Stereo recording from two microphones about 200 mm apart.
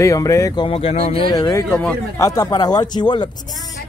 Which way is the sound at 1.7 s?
5° left (ahead or behind).